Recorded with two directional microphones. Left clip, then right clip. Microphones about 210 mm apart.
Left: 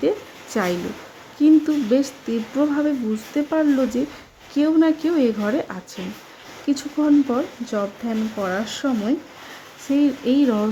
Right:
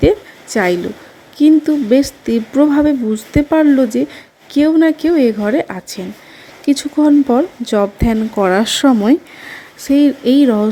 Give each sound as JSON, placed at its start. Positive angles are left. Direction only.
{"t": 0.5, "sound": "speech", "side_deg": -20}
{"t": 9.9, "sound": "speech", "side_deg": -25}